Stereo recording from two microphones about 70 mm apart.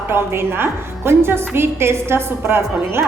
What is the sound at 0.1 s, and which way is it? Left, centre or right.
A woman's voice, right.